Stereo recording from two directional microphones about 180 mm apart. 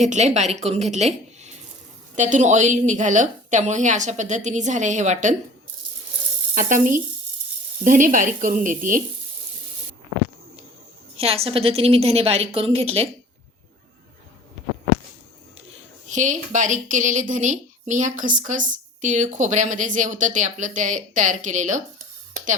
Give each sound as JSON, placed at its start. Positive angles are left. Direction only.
{"t": 0.0, "sound": "a woman's voice", "side_deg": -40}
{"t": 6.5, "sound": "a woman's voice", "side_deg": -45}
{"t": 11.2, "sound": "a woman's voice", "side_deg": -35}
{"t": 16.0, "sound": "a woman's voice", "side_deg": -40}